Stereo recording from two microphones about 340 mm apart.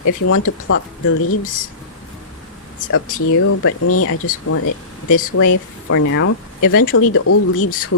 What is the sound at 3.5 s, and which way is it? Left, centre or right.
Speech, left.